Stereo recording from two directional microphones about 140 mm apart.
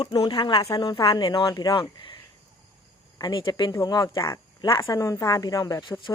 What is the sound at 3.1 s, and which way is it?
Speech, 35° left (ahead or behind).